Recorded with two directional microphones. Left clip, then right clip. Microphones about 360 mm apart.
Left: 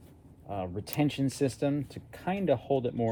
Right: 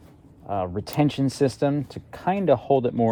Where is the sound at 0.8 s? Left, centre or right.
Right.